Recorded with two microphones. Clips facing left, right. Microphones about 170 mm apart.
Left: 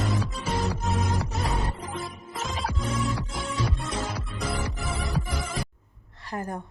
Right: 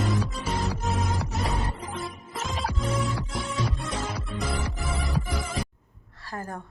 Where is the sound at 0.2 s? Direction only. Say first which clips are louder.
Even; centre (ahead or behind).